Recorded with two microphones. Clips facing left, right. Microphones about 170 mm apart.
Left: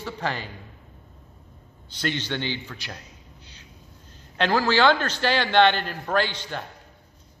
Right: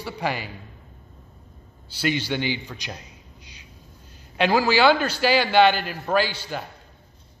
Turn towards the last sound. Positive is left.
turn(degrees=-10)  # may be behind; listen again after turning